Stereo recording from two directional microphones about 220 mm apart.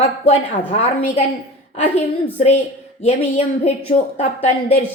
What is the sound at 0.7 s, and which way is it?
Speech, 30° left (ahead or behind).